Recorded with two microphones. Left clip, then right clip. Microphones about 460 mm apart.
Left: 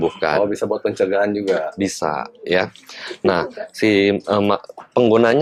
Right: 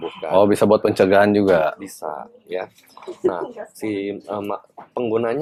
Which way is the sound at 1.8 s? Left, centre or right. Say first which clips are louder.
Left 9 dB; left.